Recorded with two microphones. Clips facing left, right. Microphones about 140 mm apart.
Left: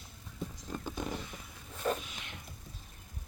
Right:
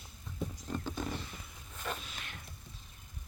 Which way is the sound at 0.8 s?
15° left (ahead or behind).